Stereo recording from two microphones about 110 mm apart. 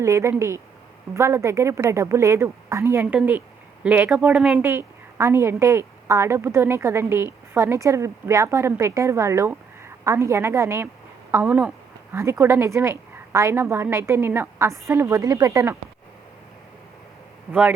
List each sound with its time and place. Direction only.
0.0 s a woman's voice: 25° right (ahead or behind); by 4.6 s 5° right (ahead or behind)
4.6 s a woman's voice: 20° right (ahead or behind)
12.1 s a woman's voice: 25° right (ahead or behind)
17.5 s speech: 15° right (ahead or behind)